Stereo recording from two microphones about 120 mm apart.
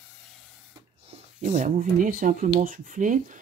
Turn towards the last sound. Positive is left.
turn(degrees=-90)